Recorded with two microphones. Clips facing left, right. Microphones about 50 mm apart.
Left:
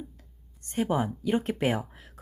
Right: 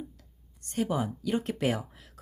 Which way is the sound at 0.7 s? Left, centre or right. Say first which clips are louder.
Left 2 dB; left.